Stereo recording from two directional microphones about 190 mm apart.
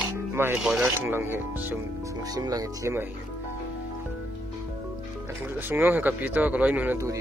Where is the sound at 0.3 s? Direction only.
10° right (ahead or behind).